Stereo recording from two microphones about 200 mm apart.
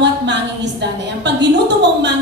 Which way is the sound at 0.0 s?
60° right (ahead or behind).